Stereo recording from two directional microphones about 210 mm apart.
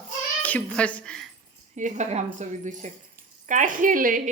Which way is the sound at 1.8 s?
35° right (ahead or behind).